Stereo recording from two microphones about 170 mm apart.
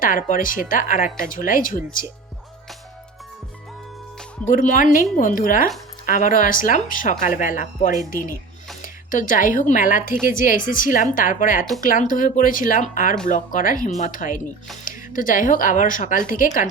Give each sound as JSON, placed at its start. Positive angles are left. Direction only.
{"t": 0.0, "sound": "speech", "side_deg": 55}
{"t": 4.4, "sound": "speech", "side_deg": 50}